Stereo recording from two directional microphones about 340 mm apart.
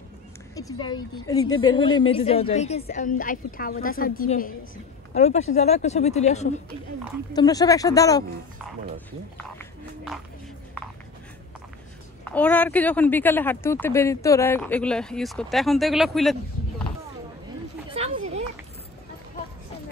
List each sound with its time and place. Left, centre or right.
0.6 s a woman's voice: centre
12.3 s speech: centre
17.8 s a sound: centre